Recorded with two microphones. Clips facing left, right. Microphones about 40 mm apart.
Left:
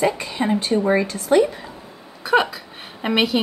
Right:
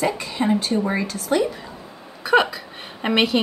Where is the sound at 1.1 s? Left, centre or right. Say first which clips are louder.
Left 4 dB; centre.